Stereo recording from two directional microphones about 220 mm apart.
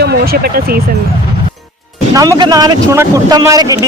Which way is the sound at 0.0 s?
45° right (ahead or behind).